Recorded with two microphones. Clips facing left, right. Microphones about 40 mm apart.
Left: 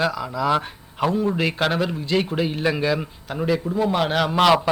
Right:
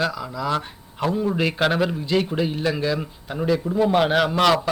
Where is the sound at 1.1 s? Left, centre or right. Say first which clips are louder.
Right 2 dB; centre.